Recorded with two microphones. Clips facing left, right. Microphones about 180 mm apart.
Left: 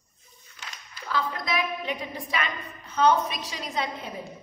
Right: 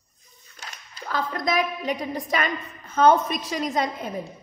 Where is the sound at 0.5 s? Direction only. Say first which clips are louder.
Right 2 dB; 45° right (ahead or behind).